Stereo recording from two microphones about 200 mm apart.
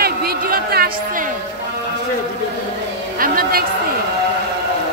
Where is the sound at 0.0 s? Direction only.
50° right (ahead or behind).